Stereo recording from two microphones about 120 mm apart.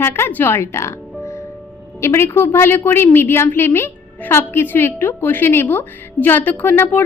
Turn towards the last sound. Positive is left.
turn(degrees=15)  # may be behind; listen again after turning